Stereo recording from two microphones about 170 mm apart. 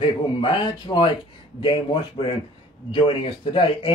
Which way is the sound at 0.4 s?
30° left (ahead or behind).